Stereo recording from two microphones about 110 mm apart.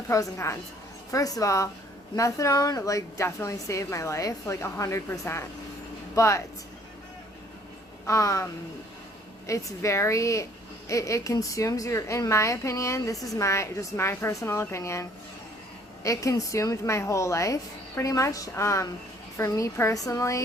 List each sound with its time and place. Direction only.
0.1 s a woman's voice: 25° left (ahead or behind)
8.0 s speech: 30° left (ahead or behind)
9.5 s speech: 25° left (ahead or behind)
16.0 s speech: 30° left (ahead or behind)